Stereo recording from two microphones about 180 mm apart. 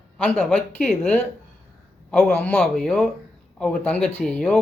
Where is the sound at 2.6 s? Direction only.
Centre (ahead or behind).